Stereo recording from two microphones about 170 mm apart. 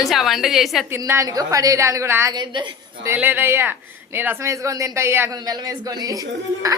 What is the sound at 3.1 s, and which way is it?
A woman's voice, 10° right (ahead or behind).